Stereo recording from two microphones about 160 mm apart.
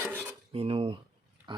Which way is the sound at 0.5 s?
35° right (ahead or behind).